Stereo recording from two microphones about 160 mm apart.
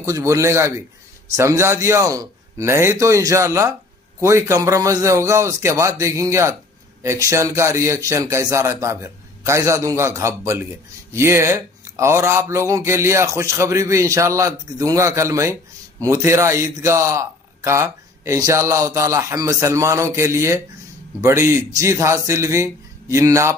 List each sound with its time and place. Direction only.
0.0 s a man's voice: 20° right (ahead or behind)